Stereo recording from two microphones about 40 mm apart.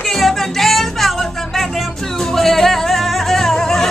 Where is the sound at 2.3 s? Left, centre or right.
Centre.